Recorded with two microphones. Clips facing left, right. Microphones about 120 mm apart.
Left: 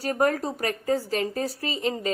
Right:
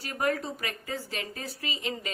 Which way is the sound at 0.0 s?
40° left (ahead or behind).